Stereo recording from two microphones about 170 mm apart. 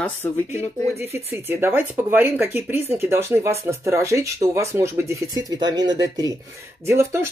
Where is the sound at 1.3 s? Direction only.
15° right (ahead or behind).